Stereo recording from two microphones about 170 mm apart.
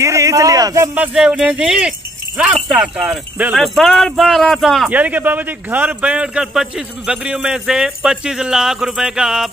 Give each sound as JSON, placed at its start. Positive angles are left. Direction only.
{"t": 0.0, "sound": "speech", "side_deg": -15}
{"t": 0.9, "sound": "a man's voice", "side_deg": -5}
{"t": 4.8, "sound": "a man's voice", "side_deg": -10}